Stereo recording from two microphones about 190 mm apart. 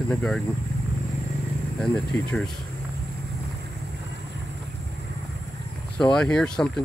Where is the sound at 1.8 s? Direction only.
5° left (ahead or behind).